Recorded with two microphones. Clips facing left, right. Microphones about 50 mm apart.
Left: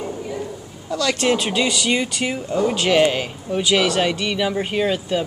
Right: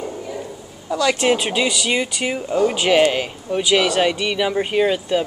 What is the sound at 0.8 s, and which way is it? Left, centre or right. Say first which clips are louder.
Speech: right 2 dB; centre.